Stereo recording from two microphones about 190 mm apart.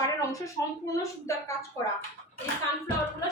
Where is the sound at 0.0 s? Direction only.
15° left (ahead or behind).